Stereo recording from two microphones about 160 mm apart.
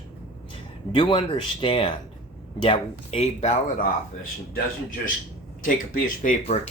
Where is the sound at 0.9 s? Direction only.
30° left (ahead or behind).